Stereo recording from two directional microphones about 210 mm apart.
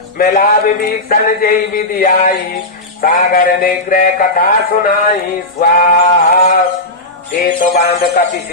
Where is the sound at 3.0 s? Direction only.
40° left (ahead or behind).